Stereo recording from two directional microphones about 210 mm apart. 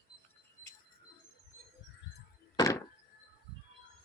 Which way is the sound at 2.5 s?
15° left (ahead or behind).